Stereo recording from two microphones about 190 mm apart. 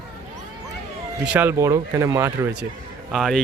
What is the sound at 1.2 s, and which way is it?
Speech, 10° right (ahead or behind).